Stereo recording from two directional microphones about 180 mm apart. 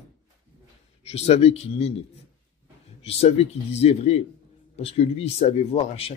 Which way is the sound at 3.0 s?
35° left (ahead or behind).